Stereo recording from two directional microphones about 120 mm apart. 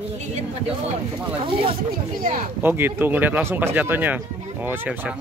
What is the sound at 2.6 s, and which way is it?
Speech, 20° right (ahead or behind).